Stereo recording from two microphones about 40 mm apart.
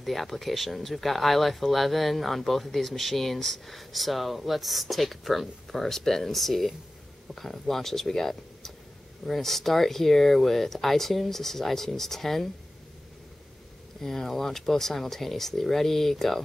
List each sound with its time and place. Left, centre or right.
0.0 s speech: centre
14.0 s speech: centre